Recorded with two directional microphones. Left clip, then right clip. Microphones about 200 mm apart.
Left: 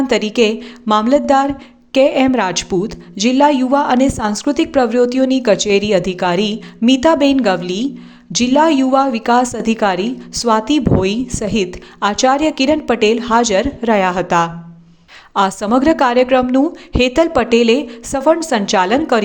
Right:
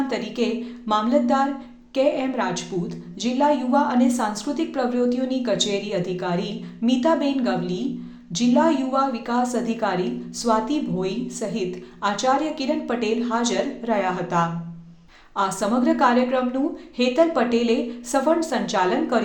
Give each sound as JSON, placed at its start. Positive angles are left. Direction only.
{"t": 0.1, "sound": "a woman's voice", "side_deg": 45}